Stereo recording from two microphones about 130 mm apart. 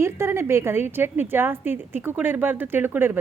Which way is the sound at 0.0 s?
20° right (ahead or behind).